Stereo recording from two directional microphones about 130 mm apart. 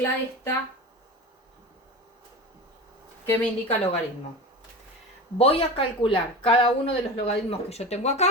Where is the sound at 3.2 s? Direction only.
20° left (ahead or behind).